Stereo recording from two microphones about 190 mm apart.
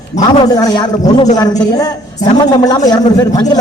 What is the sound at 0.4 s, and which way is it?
A man's voice, 20° left (ahead or behind).